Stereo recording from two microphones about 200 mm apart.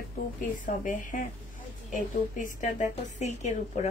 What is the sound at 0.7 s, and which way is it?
A woman's voice, 40° left (ahead or behind).